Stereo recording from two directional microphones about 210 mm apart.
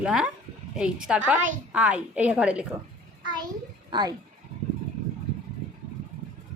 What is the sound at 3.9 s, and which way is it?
Speech, 20° right (ahead or behind).